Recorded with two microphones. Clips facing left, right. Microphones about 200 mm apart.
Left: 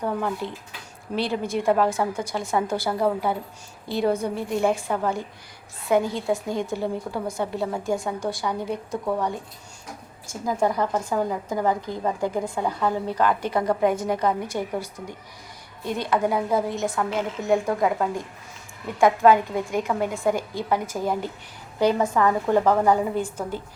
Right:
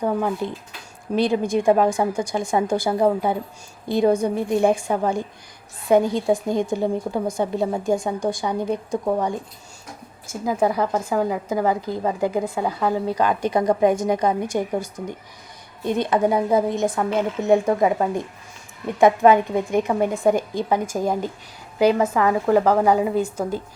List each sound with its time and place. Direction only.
0.0 s a woman's voice: 15° right (ahead or behind)
10.4 s a woman's voice: 5° right (ahead or behind)
15.8 s a woman's voice: 20° right (ahead or behind)